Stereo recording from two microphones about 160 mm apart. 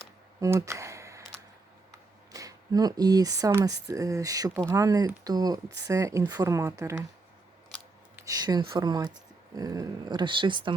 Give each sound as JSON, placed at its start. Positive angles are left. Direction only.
{"t": 0.3, "sound": "a sound", "side_deg": -20}
{"t": 3.5, "sound": "speech", "side_deg": -20}
{"t": 8.1, "sound": "speech", "side_deg": -20}